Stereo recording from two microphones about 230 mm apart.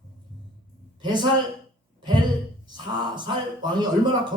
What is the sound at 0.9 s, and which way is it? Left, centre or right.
Speech, centre.